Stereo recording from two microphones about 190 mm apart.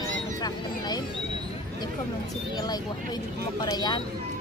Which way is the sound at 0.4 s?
20° left (ahead or behind).